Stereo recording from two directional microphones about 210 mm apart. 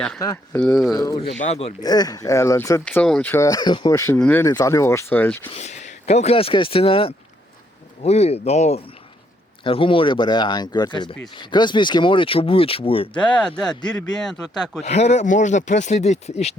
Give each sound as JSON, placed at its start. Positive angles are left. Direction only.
{"t": 0.2, "sound": "speech", "side_deg": 10}
{"t": 0.9, "sound": "speech", "side_deg": 15}
{"t": 1.8, "sound": "speech", "side_deg": 20}
{"t": 5.5, "sound": "speech", "side_deg": 30}
{"t": 13.1, "sound": "speech", "side_deg": 5}
{"t": 14.8, "sound": "speech", "side_deg": 30}